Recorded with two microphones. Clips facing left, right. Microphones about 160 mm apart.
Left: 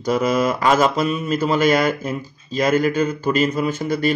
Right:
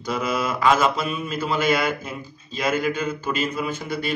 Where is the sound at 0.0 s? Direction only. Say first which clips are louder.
Left 7 dB; 40° left (ahead or behind).